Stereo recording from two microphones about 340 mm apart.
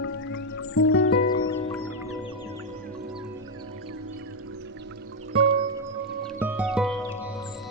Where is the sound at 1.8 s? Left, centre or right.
Centre.